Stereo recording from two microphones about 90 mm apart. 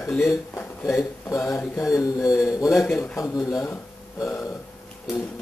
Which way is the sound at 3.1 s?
35° left (ahead or behind).